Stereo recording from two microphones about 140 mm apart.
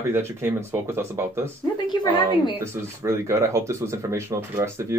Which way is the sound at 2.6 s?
20° right (ahead or behind).